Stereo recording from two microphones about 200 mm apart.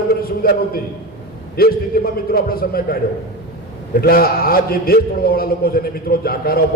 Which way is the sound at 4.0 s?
50° left (ahead or behind).